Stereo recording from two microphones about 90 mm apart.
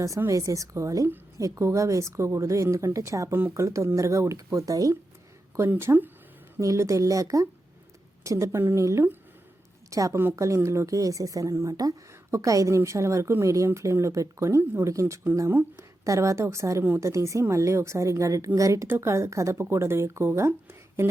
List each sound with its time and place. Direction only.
0.3 s speech: 35° right (ahead or behind)
5.5 s speech: 30° right (ahead or behind)
6.6 s speech: 35° right (ahead or behind)